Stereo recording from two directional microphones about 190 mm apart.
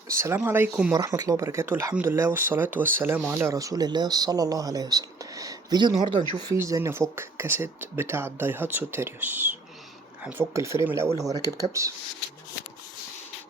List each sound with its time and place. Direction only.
0.1 s speech: 15° right (ahead or behind)